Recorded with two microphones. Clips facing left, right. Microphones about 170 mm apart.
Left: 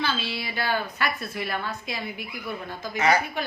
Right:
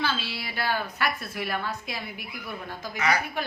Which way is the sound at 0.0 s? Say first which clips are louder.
Left 1 dB; 5° right (ahead or behind).